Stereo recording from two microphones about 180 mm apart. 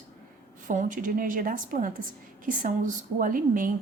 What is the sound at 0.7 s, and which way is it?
A woman's voice, 45° right (ahead or behind).